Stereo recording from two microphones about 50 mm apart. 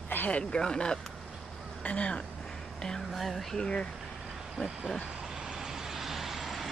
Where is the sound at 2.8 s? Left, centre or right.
Centre.